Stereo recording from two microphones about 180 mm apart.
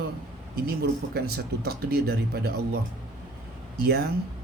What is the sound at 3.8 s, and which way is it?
Speech, 60° right (ahead or behind).